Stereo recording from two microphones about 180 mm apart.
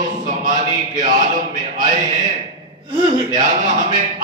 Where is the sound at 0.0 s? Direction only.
45° right (ahead or behind).